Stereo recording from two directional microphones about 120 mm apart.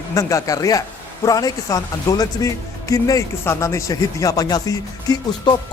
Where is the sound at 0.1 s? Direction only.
25° left (ahead or behind).